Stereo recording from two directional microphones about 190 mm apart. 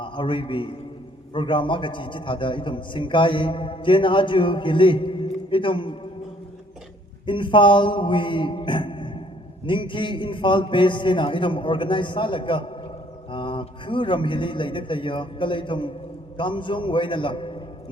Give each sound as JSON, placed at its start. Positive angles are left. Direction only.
{"t": 0.0, "sound": "a man's voice", "side_deg": 25}
{"t": 7.3, "sound": "a sound", "side_deg": 25}
{"t": 9.6, "sound": "a man's voice", "side_deg": 25}